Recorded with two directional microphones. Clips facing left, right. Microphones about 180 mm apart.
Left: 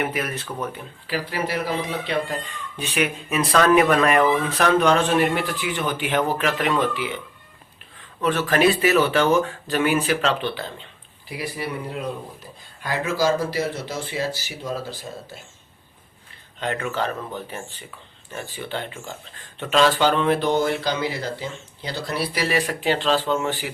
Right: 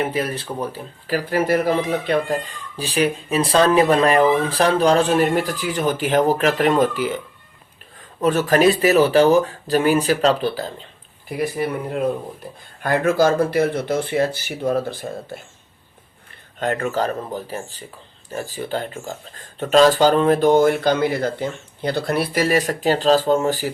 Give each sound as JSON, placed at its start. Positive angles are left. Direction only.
{"t": 0.0, "sound": "speech", "side_deg": -30}
{"t": 11.3, "sound": "speech", "side_deg": -50}
{"t": 16.6, "sound": "speech", "side_deg": -45}